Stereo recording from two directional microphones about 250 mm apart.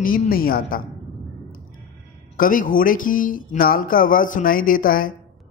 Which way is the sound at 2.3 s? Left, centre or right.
Left.